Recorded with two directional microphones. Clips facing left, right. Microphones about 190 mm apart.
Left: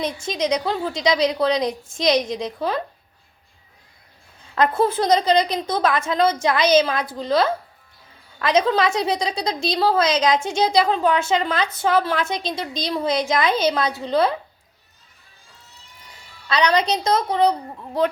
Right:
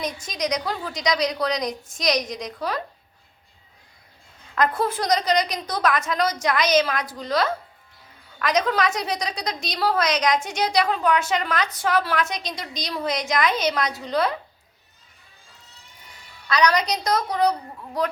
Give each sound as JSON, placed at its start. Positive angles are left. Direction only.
{"t": 0.0, "sound": "a woman's voice", "side_deg": 25}
{"t": 4.5, "sound": "a woman's voice", "side_deg": 30}
{"t": 16.5, "sound": "a woman's voice", "side_deg": 25}